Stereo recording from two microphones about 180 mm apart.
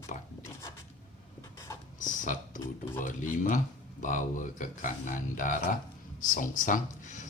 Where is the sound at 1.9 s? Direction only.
45° left (ahead or behind).